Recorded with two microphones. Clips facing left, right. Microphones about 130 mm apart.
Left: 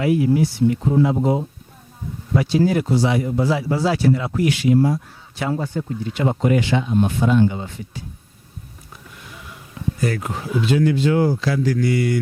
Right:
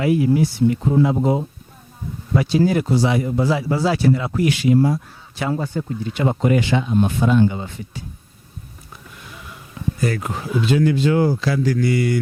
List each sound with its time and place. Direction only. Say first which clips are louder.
0.0 s speech: even; 10° right (ahead or behind)
10.0 s speech: right 1 dB; 15° right (ahead or behind)